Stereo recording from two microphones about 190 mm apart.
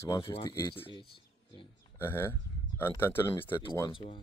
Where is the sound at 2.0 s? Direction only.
10° left (ahead or behind).